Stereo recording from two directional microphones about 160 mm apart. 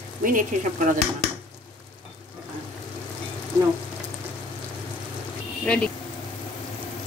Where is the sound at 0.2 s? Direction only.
60° right (ahead or behind).